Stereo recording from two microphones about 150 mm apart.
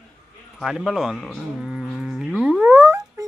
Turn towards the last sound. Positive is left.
turn(degrees=-15)  # may be behind; listen again after turning